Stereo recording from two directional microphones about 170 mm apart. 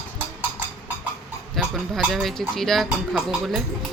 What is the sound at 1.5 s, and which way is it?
Speech, centre (ahead or behind).